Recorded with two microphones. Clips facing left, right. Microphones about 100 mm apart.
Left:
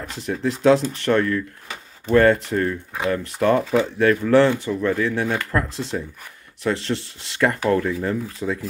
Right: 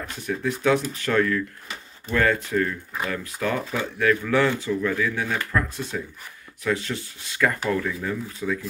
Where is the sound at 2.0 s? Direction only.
40° left (ahead or behind).